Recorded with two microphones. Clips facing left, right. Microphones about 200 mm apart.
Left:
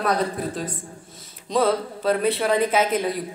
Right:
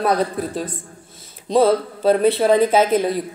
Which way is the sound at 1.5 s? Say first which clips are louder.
Right 5 dB; 30° right (ahead or behind).